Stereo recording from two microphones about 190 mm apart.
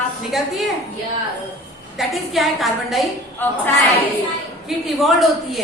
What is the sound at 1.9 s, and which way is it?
A woman's voice, centre (ahead or behind).